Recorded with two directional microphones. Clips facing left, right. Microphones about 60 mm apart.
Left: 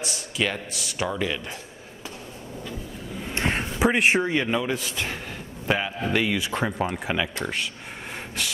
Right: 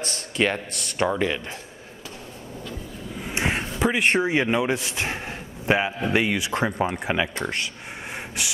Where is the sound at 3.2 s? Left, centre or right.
Centre.